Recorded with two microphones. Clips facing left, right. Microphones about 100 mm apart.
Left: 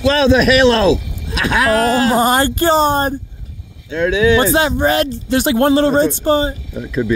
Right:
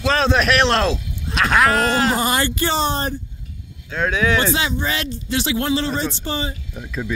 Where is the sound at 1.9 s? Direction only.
40° left (ahead or behind).